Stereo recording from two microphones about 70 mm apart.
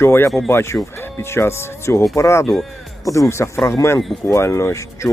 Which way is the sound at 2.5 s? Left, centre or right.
Centre.